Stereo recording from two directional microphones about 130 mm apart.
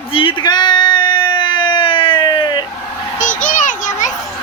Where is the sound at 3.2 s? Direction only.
90° left.